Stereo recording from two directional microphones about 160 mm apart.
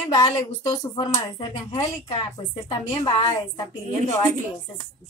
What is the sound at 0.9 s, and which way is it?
Speech, 30° left (ahead or behind).